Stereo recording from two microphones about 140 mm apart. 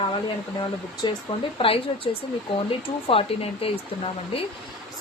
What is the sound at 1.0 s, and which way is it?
Speech, 30° left (ahead or behind).